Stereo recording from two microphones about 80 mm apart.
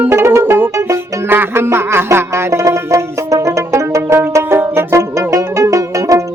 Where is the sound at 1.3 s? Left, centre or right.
Right.